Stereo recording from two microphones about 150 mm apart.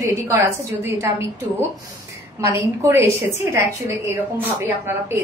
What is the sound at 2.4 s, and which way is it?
A woman's voice, 15° right (ahead or behind).